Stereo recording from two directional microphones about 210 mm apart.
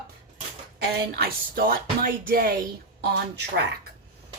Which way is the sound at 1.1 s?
45° right (ahead or behind).